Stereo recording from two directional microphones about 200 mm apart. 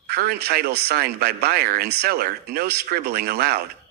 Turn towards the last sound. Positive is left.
turn(degrees=-50)  # may be behind; listen again after turning